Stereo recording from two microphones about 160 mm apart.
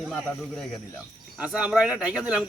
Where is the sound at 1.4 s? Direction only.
5° right (ahead or behind).